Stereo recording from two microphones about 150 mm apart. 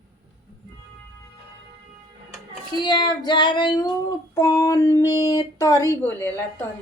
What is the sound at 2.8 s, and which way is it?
Female singing, 30° left (ahead or behind).